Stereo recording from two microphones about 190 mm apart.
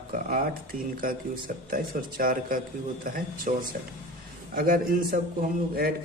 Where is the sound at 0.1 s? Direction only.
50° right (ahead or behind).